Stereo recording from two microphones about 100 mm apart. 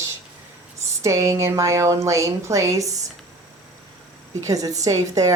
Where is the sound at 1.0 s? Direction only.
30° right (ahead or behind).